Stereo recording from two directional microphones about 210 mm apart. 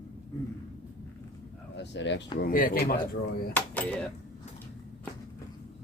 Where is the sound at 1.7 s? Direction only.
55° left (ahead or behind).